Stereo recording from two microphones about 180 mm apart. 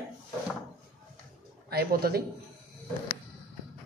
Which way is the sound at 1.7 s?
60° right (ahead or behind).